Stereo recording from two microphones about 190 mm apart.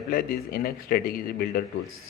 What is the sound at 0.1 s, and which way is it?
A man's voice, 50° left (ahead or behind).